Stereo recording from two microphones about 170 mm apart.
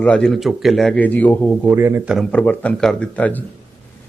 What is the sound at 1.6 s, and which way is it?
Speech, 15° right (ahead or behind).